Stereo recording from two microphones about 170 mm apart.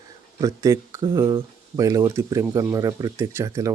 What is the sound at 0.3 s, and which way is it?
Speech, 20° right (ahead or behind).